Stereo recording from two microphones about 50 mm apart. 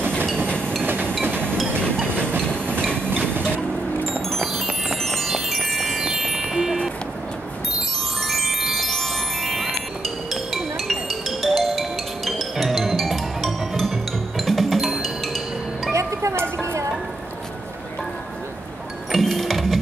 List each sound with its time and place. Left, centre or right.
0.8 s a sound: right
3.5 s vehicle: right
4.3 s wind chime: centre
8.3 s chime: centre
15.9 s music: right
16.5 s stir: right
19.1 s music: centre